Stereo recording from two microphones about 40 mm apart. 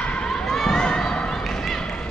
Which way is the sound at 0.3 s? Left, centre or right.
Centre.